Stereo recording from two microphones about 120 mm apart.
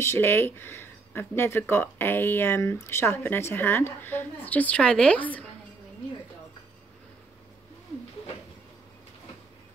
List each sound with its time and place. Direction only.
0.0 s speech: 20° left (ahead or behind)